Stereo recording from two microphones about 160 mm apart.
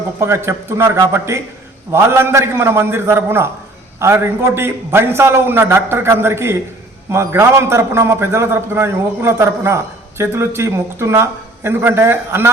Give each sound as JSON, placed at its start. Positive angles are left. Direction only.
{"t": 0.2, "sound": "a man's voice", "side_deg": -15}